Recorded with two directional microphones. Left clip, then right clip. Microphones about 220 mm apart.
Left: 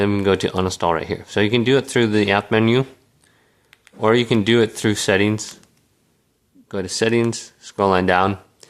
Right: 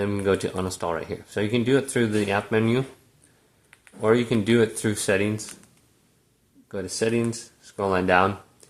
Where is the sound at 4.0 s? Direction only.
35° left (ahead or behind).